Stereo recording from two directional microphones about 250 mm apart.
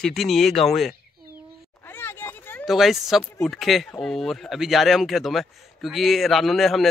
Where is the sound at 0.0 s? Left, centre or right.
Centre.